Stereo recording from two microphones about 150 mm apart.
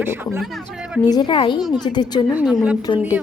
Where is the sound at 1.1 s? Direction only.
30° left (ahead or behind).